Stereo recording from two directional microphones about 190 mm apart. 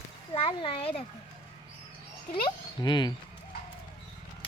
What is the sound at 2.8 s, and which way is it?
Speech, 20° left (ahead or behind).